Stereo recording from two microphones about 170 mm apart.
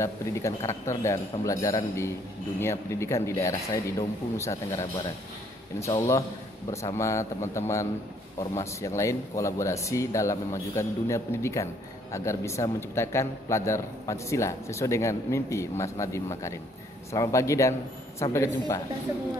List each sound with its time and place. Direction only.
0.0 s speech: 15° left (ahead or behind)
5.9 s speech: 15° left (ahead or behind)